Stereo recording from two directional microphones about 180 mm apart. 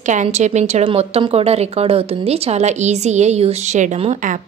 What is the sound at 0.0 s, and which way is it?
A woman's voice, 40° right (ahead or behind).